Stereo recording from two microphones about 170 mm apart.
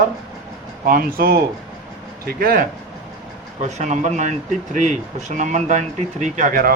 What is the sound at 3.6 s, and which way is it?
Speech, 45° right (ahead or behind).